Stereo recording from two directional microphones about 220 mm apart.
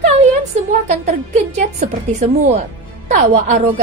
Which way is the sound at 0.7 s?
30° right (ahead or behind).